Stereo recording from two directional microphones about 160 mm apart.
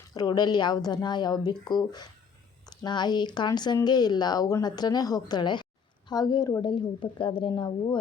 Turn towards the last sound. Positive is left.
turn(degrees=30)  # may be behind; listen again after turning